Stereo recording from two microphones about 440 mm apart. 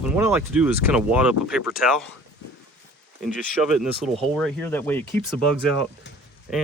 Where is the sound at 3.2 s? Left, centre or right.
Centre.